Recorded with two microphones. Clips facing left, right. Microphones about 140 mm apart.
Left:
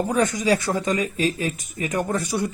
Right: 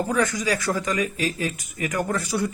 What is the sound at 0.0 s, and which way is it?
Speech, 20° left (ahead or behind).